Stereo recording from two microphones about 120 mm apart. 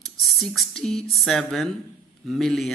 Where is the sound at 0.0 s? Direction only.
Centre (ahead or behind).